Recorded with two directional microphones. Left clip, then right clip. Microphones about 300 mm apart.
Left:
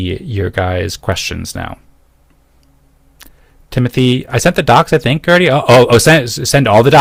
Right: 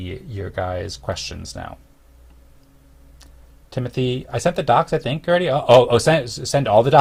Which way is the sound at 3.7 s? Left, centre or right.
Left.